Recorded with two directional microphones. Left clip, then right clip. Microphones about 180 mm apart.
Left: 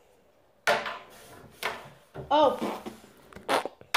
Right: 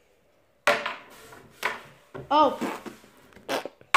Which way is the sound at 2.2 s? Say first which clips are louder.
Right 1 dB; 40° right (ahead or behind).